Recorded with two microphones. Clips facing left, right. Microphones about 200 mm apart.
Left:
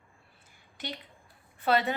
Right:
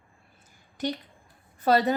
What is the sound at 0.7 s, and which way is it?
A woman's voice, 40° right (ahead or behind).